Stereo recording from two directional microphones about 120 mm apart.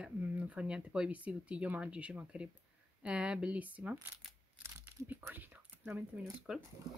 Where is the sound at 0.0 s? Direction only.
10° right (ahead or behind).